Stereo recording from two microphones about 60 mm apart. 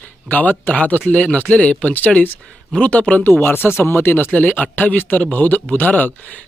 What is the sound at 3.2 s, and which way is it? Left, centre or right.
Speech, left.